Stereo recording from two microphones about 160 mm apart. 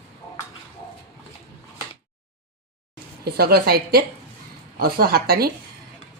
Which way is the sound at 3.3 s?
75° right (ahead or behind).